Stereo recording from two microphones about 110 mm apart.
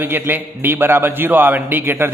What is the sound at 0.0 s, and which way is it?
A man's voice, 20° right (ahead or behind).